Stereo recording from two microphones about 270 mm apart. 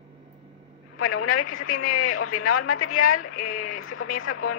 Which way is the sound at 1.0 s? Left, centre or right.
Left.